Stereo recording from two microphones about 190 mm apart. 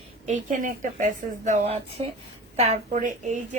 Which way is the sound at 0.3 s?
40° right (ahead or behind).